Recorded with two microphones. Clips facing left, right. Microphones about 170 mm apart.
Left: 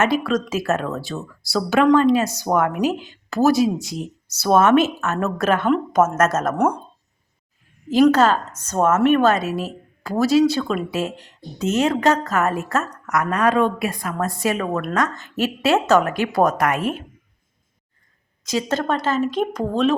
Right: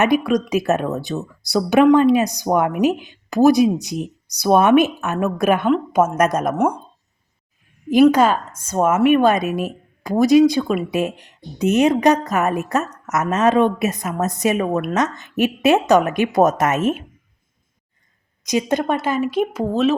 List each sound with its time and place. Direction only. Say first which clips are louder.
0.0 s a woman's voice: right 3 dB; 15° right (ahead or behind)
7.9 s a woman's voice: right 2 dB; 15° right (ahead or behind)
18.4 s a woman's voice: right 3 dB; 15° right (ahead or behind)